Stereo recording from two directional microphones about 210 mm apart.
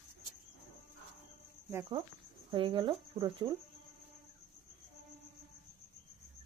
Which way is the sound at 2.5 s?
25° right (ahead or behind).